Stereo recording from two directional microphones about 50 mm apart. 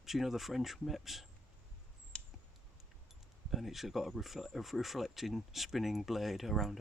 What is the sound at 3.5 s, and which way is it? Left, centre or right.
Speech, centre.